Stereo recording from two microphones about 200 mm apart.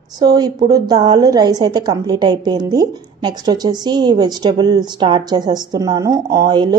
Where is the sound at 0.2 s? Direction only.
20° right (ahead or behind).